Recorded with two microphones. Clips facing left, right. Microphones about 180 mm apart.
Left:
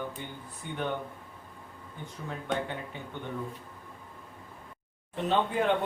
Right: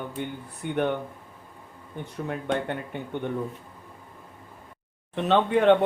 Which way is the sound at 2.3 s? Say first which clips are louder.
Right 5 dB; 55° right (ahead or behind).